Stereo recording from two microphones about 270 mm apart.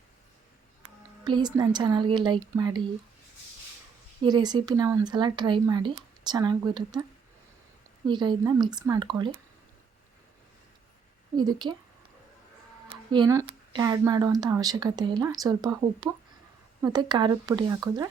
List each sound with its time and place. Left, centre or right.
1.2 s speech: centre
4.3 s speech: centre
8.0 s speech: centre
11.3 s speech: centre
13.1 s speech: centre
16.8 s speech: centre